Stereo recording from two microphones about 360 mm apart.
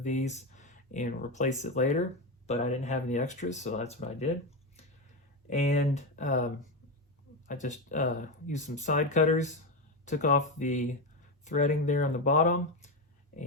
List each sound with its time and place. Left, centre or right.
0.0 s speech: centre
5.5 s speech: centre
13.3 s a sound: left